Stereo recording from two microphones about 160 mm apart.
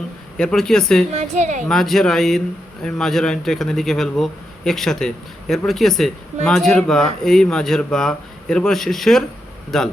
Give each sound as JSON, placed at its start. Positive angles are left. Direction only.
{"t": 0.3, "sound": "a man's voice", "side_deg": 5}
{"t": 1.1, "sound": "a woman's voice", "side_deg": -50}
{"t": 1.6, "sound": "a man's voice", "side_deg": 5}